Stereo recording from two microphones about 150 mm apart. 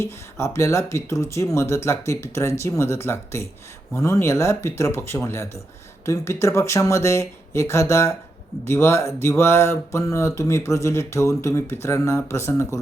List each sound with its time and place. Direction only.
0.0 s speech: 20° left (ahead or behind)